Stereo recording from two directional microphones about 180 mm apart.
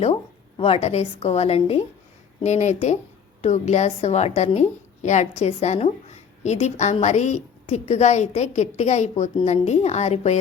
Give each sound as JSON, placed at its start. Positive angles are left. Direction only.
{"t": 0.0, "sound": "a woman's voice", "side_deg": 35}